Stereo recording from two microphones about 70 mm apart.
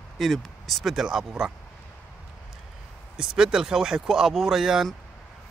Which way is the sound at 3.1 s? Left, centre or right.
Centre.